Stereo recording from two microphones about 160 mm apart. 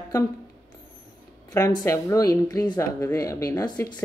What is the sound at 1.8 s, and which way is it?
Speech, 20° left (ahead or behind).